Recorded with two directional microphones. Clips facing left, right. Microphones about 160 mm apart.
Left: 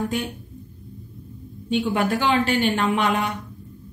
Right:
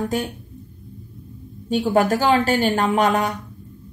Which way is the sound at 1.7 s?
40° right (ahead or behind).